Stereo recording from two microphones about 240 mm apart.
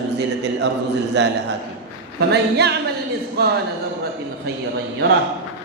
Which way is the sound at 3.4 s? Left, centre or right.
Right.